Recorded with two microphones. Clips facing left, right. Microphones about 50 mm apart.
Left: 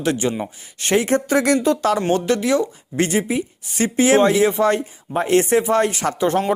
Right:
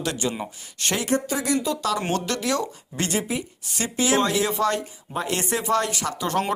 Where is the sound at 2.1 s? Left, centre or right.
Left.